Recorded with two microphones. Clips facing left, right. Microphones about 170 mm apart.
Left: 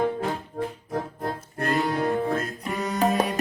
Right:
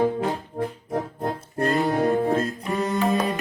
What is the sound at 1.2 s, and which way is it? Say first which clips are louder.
Music: right 4 dB; 25° right (ahead or behind).